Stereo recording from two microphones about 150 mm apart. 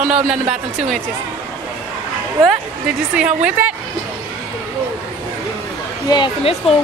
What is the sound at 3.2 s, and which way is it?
Speech, 5° right (ahead or behind).